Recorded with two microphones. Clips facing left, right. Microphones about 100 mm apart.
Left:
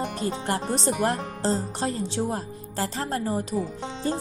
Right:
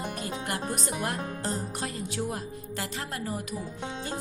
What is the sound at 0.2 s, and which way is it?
Speech, 30° left (ahead or behind).